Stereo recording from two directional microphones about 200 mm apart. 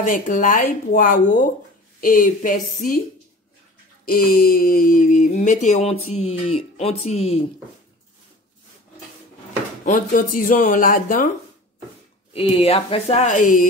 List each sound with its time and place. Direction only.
0.0 s speech: 40° left (ahead or behind)
4.0 s speech: 45° left (ahead or behind); by 7.4 s 30° left (ahead or behind)
9.8 s speech: 40° left (ahead or behind)
12.3 s speech: 30° left (ahead or behind)